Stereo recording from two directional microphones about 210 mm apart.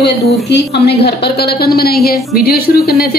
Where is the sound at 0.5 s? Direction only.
50° left (ahead or behind).